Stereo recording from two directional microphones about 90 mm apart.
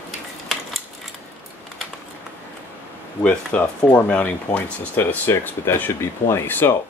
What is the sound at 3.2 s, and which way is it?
Speech, 15° left (ahead or behind).